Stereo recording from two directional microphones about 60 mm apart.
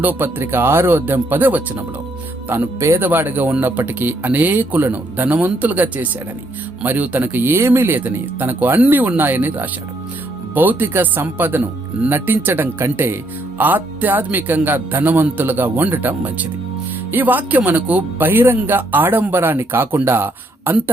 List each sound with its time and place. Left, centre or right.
0.0 s speech: right
2.7 s speech: right
3.0 s speech: right
7.6 s speech: right